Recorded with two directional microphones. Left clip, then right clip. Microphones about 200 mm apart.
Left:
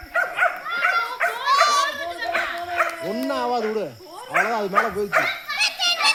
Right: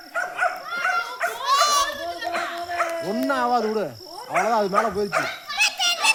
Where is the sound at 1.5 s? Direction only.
60° right (ahead or behind).